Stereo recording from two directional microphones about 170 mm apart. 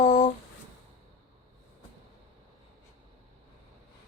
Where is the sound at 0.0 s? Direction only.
45° left (ahead or behind).